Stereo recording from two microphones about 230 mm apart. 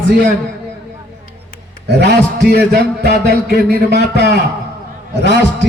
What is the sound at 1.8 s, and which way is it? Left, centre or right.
A man's voice, right.